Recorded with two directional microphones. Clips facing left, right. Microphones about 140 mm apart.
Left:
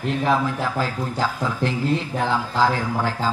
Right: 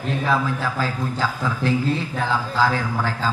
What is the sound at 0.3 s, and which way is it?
A man's voice, 20° left (ahead or behind).